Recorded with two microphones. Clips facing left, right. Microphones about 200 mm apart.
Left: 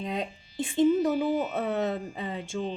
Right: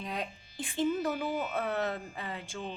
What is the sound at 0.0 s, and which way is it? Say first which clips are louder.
A woman's voice: left 5 dB; 25° left (ahead or behind).